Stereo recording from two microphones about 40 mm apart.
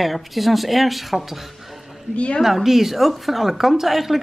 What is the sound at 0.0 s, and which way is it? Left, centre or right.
A woman's voice, centre.